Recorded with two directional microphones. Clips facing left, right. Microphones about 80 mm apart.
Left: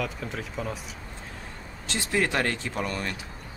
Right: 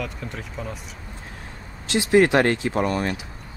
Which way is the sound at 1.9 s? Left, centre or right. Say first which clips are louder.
Right 9 dB; right.